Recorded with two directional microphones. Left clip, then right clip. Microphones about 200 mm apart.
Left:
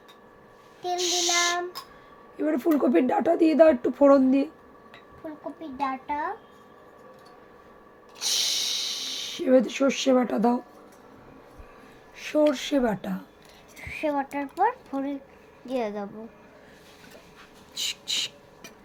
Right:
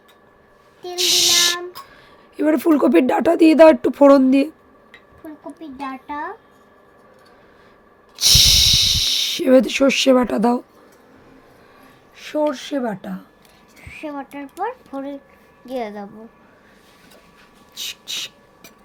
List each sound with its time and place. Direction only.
0.9 s a sound: 45° right (ahead or behind)
2.3 s a woman's voice: 45° right (ahead or behind)
5.5 s a child's voice: 5° right (ahead or behind)
8.1 s snort: 45° right (ahead or behind)
12.1 s a woman's voice: 15° right (ahead or behind)
13.8 s speech: 15° left (ahead or behind)
15.6 s a woman's voice: 10° right (ahead or behind)
17.7 s a sound: 10° right (ahead or behind)